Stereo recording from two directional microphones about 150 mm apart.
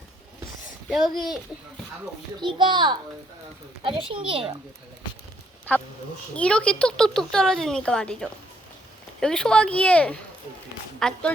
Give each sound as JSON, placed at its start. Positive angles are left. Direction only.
{"t": 0.9, "sound": "speech", "side_deg": 0}
{"t": 2.4, "sound": "a child's voice", "side_deg": -30}
{"t": 6.3, "sound": "speech", "side_deg": 10}